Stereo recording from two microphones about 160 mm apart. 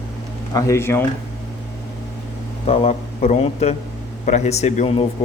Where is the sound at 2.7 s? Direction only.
40° left (ahead or behind).